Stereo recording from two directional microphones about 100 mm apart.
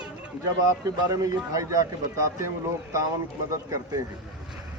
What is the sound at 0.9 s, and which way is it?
A man's voice, 35° right (ahead or behind).